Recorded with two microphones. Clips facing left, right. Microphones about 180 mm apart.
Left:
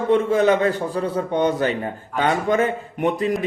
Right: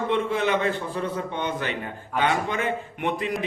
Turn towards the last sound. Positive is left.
turn(degrees=40)  # may be behind; listen again after turning